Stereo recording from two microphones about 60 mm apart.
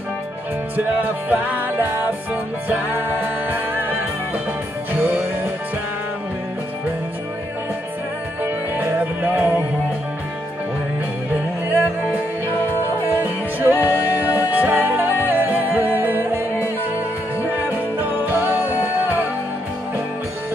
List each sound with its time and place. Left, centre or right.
0.7 s music: right
4.9 s music: right
8.7 s music: right
11.3 s music: right
17.5 s music: right